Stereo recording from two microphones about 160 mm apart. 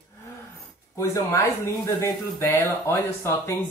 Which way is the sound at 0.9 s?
15° left (ahead or behind).